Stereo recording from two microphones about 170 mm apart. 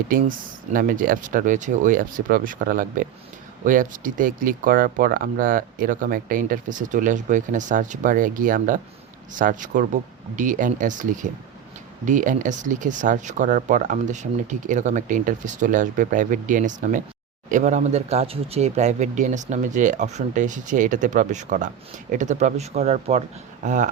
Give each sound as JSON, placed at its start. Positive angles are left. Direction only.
{"t": 0.1, "sound": "speech", "side_deg": -55}